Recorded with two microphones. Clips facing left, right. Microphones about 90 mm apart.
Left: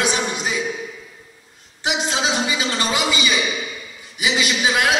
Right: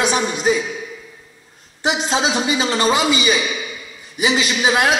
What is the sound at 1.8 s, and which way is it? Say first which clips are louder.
A man's voice: right 3 dB; 35° right (ahead or behind).